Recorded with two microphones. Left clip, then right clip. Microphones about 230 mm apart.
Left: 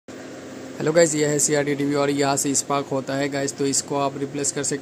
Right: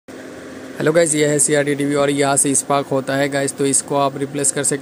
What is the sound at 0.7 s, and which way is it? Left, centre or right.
Speech, centre.